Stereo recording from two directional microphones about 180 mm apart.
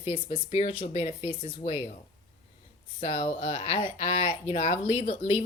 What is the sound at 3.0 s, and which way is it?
Speech, 35° left (ahead or behind).